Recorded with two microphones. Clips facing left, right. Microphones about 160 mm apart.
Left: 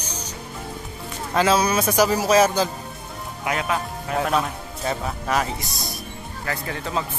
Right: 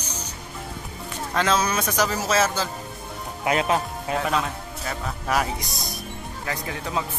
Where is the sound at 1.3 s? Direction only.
10° left (ahead or behind).